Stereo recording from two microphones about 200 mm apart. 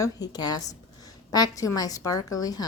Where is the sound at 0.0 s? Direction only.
20° left (ahead or behind).